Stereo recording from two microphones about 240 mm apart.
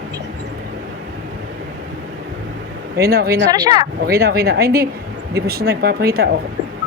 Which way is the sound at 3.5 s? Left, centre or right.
Centre.